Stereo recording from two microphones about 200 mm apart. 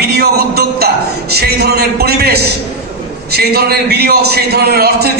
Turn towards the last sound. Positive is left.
turn(degrees=-50)  # may be behind; listen again after turning